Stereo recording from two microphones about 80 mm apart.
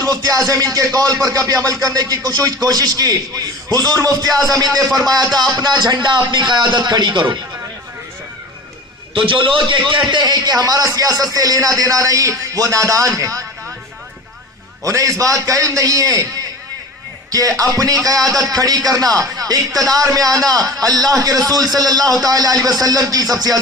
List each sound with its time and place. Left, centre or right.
0.0 s speech: right
9.1 s speech: right
14.8 s speech: right
17.3 s speech: right